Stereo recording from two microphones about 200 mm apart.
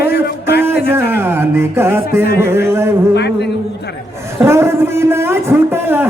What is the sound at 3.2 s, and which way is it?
Speech, 55° left (ahead or behind).